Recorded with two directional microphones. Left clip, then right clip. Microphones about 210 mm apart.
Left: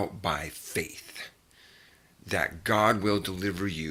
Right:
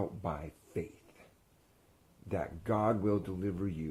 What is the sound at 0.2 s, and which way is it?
Speech, 10° left (ahead or behind).